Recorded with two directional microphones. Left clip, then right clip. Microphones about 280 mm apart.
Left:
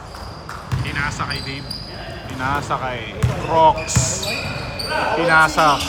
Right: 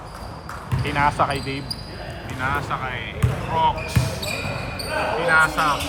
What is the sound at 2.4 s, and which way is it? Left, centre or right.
Speech, centre.